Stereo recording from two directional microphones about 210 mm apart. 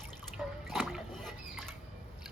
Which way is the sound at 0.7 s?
Centre (ahead or behind).